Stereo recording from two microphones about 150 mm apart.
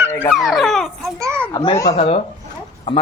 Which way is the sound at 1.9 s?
45° left (ahead or behind).